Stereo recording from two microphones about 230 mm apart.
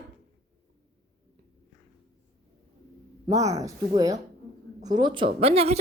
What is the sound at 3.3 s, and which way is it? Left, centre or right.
A woman's voice, centre.